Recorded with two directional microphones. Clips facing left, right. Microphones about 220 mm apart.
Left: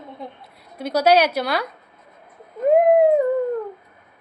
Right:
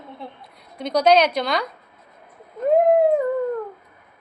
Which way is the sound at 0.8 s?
5° left (ahead or behind).